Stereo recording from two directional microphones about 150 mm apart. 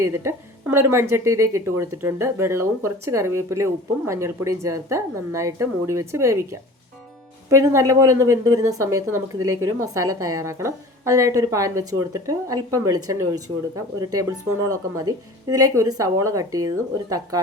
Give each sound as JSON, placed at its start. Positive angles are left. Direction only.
{"t": 0.0, "sound": "a woman's voice", "side_deg": -20}